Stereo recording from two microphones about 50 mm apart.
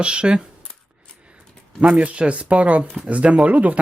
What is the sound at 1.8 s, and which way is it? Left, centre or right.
Speech, right.